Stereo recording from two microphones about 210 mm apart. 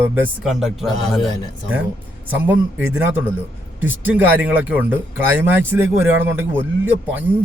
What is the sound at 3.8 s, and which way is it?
Speech, 10° right (ahead or behind).